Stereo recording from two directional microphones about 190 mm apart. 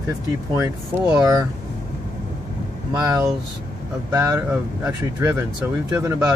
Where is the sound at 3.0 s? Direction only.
15° right (ahead or behind).